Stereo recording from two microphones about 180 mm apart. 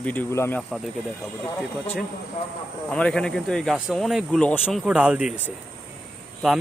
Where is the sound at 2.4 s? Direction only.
35° left (ahead or behind).